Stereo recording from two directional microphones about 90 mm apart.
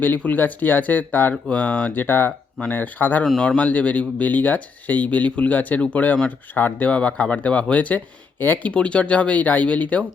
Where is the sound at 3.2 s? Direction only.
5° left (ahead or behind).